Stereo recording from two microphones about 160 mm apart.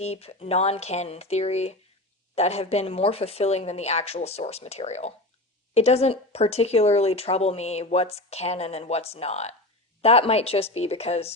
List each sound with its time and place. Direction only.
0.0 s speech: 40° left (ahead or behind)